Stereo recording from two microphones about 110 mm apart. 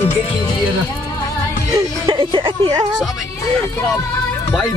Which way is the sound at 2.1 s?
50° right (ahead or behind).